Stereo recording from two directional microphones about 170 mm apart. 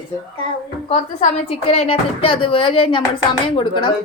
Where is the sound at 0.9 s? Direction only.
40° left (ahead or behind).